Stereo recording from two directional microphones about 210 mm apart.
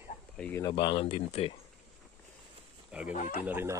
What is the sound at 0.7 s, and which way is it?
Speech, 25° left (ahead or behind).